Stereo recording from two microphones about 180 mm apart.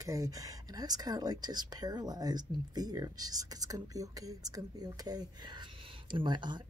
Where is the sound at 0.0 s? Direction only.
20° right (ahead or behind).